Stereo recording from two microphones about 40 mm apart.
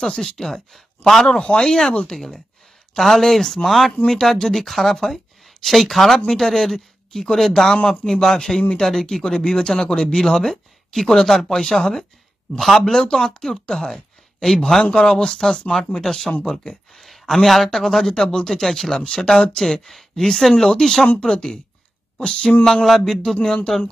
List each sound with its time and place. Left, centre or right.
0.0 s speech: centre
1.3 s speech: centre
7.7 s speech: centre
18.5 s speech: centre; by 22.6 s left
22.8 s speech: centre
23.4 s speech: centre